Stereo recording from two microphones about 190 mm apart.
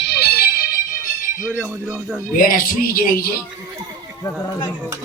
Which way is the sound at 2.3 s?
50° left (ahead or behind).